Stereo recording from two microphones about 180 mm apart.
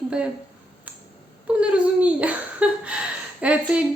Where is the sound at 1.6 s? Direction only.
5° right (ahead or behind).